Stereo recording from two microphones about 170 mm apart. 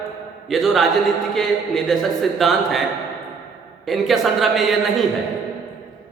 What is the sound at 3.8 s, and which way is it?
A woman's voice, centre (ahead or behind).